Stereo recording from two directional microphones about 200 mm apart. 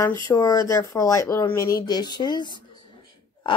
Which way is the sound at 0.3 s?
20° left (ahead or behind).